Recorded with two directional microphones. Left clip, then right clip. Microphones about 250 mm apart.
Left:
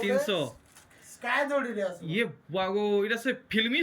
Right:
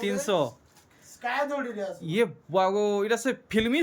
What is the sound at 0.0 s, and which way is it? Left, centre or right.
A man's voice, centre.